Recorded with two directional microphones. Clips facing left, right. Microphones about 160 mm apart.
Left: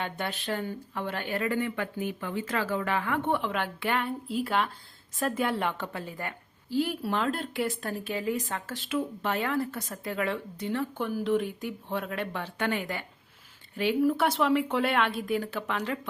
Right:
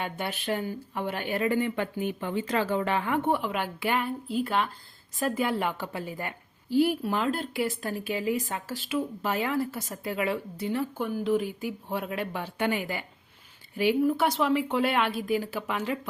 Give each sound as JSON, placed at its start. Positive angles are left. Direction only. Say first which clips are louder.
{"t": 0.0, "sound": "speech", "louder": "right 1 dB", "side_deg": -10}
{"t": 3.2, "sound": "speech", "louder": "right 1 dB", "side_deg": -5}
{"t": 7.1, "sound": "speech", "louder": "right 1 dB", "side_deg": -5}